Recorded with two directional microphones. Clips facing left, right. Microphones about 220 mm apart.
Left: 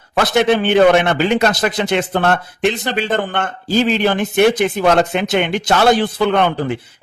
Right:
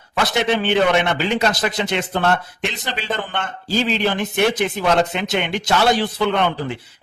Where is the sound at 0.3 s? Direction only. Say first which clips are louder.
Left 6 dB; 50° left (ahead or behind).